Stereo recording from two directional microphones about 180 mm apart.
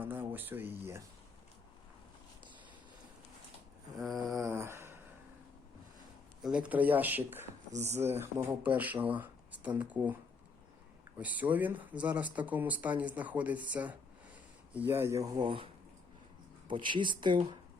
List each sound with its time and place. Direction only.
0.0 s speech: 10° right (ahead or behind)
3.9 s a sound: centre (ahead or behind)
4.4 s a sound: 15° right (ahead or behind)
6.4 s speech: 5° right (ahead or behind)
7.7 s speech: 40° right (ahead or behind)
7.9 s speech: 10° right (ahead or behind)
11.2 s speech: 10° right (ahead or behind); by 17.3 s 25° right (ahead or behind)